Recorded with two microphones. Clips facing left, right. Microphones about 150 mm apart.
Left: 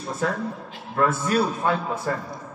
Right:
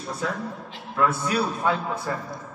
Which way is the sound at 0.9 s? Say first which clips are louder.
Left 2 dB; 50° left (ahead or behind).